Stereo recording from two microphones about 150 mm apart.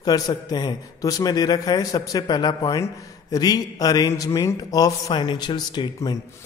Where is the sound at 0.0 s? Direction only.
25° left (ahead or behind).